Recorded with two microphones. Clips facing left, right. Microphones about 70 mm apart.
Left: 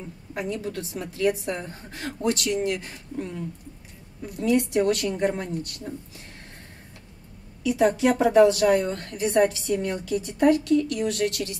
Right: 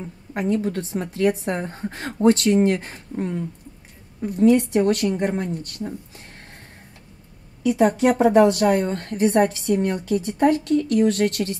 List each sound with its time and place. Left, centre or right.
0.3 s a woman's voice: right
7.6 s a woman's voice: right